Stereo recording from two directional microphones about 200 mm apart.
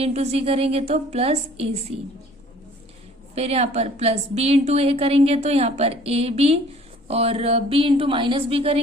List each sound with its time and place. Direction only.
0.0 s a woman's voice: 30° right (ahead or behind)
3.3 s a woman's voice: 30° right (ahead or behind)